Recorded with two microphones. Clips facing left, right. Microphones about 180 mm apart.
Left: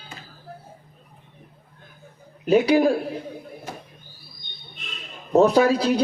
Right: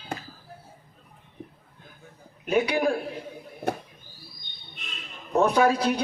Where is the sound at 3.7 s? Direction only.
65° right (ahead or behind).